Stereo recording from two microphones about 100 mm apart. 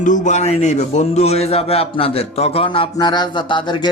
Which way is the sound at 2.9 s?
45° left (ahead or behind).